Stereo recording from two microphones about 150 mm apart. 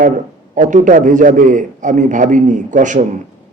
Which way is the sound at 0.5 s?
55° right (ahead or behind).